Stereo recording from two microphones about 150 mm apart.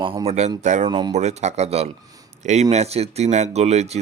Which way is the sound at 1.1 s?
50° right (ahead or behind).